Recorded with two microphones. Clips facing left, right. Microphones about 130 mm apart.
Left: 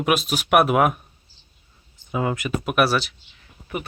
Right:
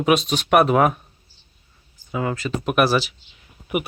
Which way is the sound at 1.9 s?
20° left (ahead or behind).